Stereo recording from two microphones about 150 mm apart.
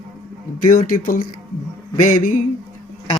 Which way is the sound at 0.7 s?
65° left (ahead or behind).